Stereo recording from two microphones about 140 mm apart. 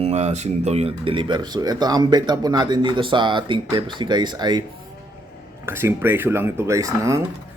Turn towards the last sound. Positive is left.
turn(degrees=-20)  # may be behind; listen again after turning